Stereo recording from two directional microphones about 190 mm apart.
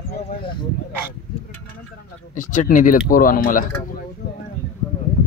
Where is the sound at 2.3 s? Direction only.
40° left (ahead or behind).